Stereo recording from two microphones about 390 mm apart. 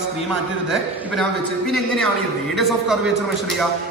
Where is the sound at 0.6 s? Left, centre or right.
Centre.